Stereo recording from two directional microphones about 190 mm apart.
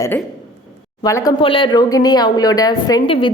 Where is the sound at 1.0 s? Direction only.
20° left (ahead or behind).